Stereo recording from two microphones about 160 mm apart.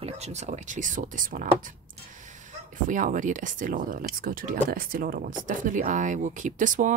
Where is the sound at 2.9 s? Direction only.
55° right (ahead or behind).